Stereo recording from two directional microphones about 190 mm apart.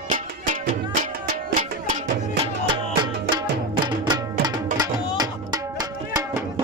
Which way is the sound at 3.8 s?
25° right (ahead or behind).